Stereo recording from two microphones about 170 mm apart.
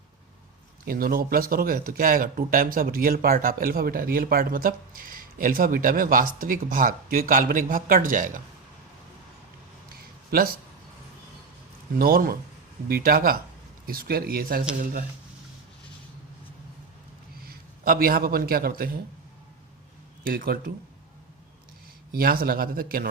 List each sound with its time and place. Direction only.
0.9 s speech: 60° right (ahead or behind)
10.3 s speech: 60° right (ahead or behind)
11.9 s speech: 60° right (ahead or behind)
17.3 s a man's voice: 60° right (ahead or behind)
20.2 s speech: 60° right (ahead or behind)
22.1 s speech: 60° right (ahead or behind)